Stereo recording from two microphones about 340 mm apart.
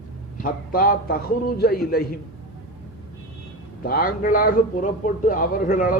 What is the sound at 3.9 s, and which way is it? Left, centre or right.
A man's voice, left.